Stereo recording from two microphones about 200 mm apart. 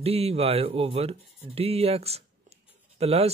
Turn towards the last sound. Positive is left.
turn(degrees=-30)  # may be behind; listen again after turning